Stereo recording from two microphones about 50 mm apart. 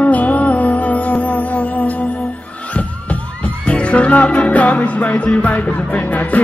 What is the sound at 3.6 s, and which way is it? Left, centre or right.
Music, left.